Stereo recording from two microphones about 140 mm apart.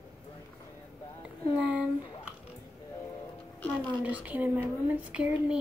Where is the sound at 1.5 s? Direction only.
10° right (ahead or behind).